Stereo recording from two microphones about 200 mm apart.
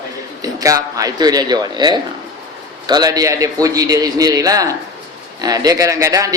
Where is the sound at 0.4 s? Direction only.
15° right (ahead or behind).